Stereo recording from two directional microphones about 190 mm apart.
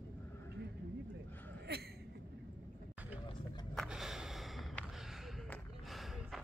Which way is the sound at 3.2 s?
25° left (ahead or behind).